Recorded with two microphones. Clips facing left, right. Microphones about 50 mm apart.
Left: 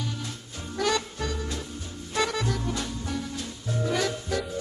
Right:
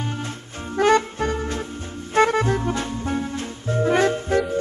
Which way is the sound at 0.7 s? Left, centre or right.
Right.